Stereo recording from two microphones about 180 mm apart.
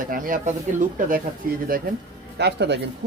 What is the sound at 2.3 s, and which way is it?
Speech, 70° right (ahead or behind).